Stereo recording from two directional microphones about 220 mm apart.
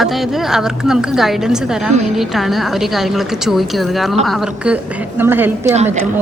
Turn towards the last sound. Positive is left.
turn(degrees=-10)  # may be behind; listen again after turning